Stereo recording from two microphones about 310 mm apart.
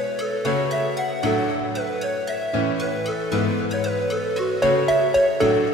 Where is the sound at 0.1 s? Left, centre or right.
Centre.